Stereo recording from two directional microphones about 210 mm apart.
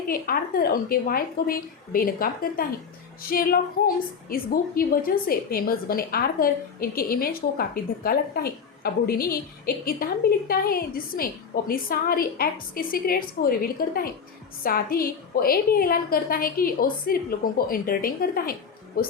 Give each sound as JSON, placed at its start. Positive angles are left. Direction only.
{"t": 0.1, "sound": "a woman's voice", "side_deg": 45}